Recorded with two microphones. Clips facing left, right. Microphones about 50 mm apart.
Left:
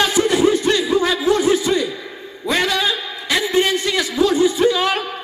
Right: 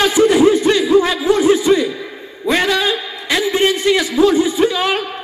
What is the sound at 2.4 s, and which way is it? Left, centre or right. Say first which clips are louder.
Speech: right 3 dB; right.